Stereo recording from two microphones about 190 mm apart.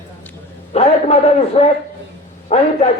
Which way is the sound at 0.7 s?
35° left (ahead or behind).